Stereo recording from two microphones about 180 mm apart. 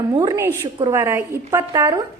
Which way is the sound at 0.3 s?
15° right (ahead or behind).